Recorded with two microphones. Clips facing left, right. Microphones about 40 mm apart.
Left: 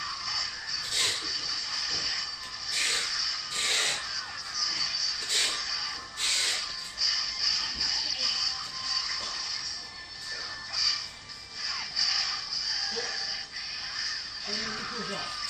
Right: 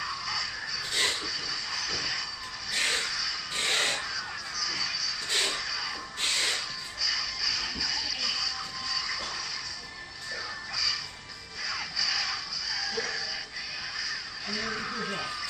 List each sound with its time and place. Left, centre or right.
0.0 s music: centre
0.9 s shuffle: right
2.7 s a sound: centre
11.6 s music: centre
13.9 s crow: centre